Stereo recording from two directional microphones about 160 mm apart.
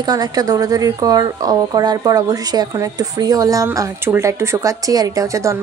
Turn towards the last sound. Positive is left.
turn(degrees=-20)  # may be behind; listen again after turning